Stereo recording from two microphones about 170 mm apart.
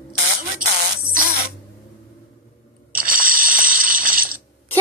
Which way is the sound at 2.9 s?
55° right (ahead or behind).